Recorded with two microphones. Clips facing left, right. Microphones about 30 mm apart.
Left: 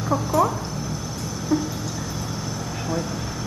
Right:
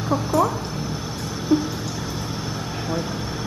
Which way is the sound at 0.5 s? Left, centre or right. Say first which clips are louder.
Right 1 dB; right.